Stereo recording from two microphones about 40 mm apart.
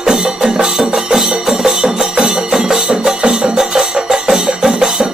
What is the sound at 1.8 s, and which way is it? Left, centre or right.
Music, right.